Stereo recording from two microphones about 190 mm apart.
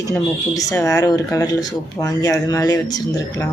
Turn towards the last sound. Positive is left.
turn(degrees=15)  # may be behind; listen again after turning